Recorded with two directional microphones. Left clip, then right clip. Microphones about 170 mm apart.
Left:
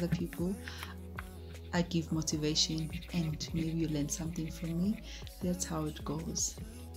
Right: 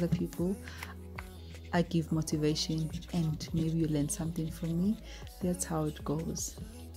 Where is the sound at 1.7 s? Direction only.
40° right (ahead or behind).